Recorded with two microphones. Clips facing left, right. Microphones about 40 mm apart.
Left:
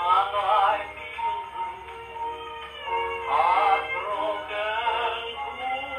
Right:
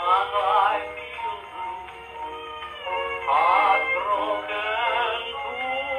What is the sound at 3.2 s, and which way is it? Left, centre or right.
Synthetic singing, centre.